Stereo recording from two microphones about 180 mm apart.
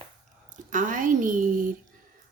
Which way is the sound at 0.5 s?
45° right (ahead or behind).